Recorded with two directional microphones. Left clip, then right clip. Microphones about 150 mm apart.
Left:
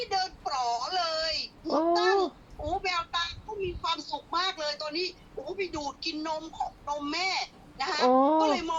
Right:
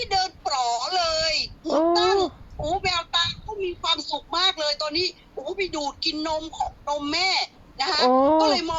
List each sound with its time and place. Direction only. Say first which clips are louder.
0.0 s child singing: right 6 dB; 55° right (ahead or behind)
1.9 s a sound: right 2 dB; 55° right (ahead or behind)
8.1 s speech: right 4 dB; 30° right (ahead or behind)
8.4 s speech: right 5 dB; 55° right (ahead or behind)